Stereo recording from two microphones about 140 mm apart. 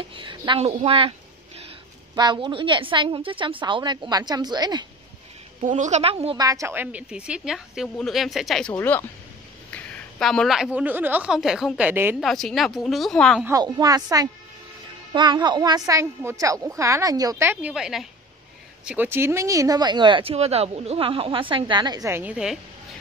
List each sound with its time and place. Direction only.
0.1 s a sound: 35° right (ahead or behind)
0.6 s speech: 45° right (ahead or behind)
2.1 s speech: 30° right (ahead or behind)
5.6 s a woman's voice: 60° right (ahead or behind); by 6.3 s 45° right (ahead or behind)
6.3 s a woman's voice: 25° right (ahead or behind); by 8.7 s centre (ahead or behind)
8.7 s a woman's voice: 15° left (ahead or behind); by 12.2 s 15° right (ahead or behind)
12.2 s a woman's voice: 5° left (ahead or behind)
13.5 s a woman's voice: 25° right (ahead or behind)
15.9 s a woman's voice: 20° right (ahead or behind)
17.5 s a woman's voice: 10° right (ahead or behind)
18.9 s speech: 15° right (ahead or behind)
22.1 s a woman's voice: 10° right (ahead or behind)